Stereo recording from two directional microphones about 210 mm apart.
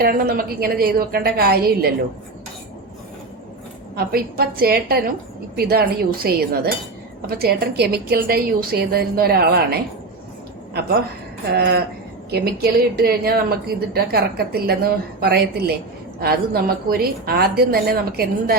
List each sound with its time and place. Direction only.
0.0 s a woman's voice: 45° right (ahead or behind)
3.9 s a woman's voice: 45° right (ahead or behind)
11.5 s a woman's voice: 50° right (ahead or behind)